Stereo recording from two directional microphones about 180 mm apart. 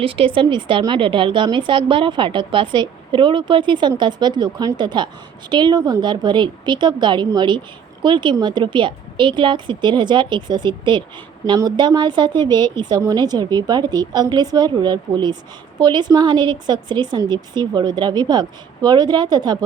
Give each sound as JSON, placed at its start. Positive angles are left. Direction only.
{"t": 0.0, "sound": "a woman's voice", "side_deg": -30}